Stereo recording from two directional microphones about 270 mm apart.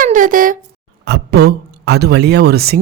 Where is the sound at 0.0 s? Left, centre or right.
Right.